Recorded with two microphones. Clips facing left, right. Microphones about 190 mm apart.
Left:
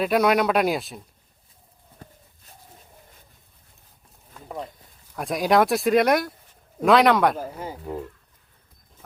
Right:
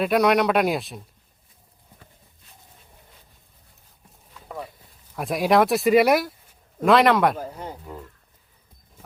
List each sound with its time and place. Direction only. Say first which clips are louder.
0.0 s speech: right 1 dB; centre (ahead or behind)
4.4 s a sound: left 5 dB; 50° left (ahead or behind)
5.1 s speech: right 1 dB; centre (ahead or behind)